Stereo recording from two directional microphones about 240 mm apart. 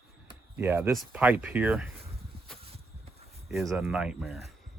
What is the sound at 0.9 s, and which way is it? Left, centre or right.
Speech, centre.